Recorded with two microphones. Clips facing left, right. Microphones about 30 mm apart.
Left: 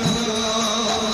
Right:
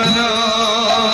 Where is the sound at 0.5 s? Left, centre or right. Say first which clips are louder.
Right 7 dB; right.